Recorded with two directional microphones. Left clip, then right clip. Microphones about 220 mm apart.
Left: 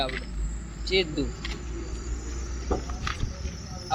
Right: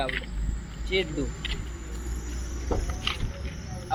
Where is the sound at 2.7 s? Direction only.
30° left (ahead or behind).